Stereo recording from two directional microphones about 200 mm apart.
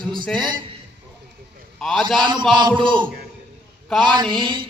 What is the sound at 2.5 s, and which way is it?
A man's voice, 25° right (ahead or behind).